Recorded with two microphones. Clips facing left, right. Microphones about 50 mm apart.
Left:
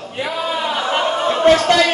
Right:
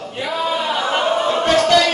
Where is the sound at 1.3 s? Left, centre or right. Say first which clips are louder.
Left 4 dB; left.